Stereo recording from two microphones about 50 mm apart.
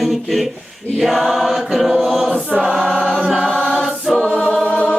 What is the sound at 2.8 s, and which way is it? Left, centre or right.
Choir, centre.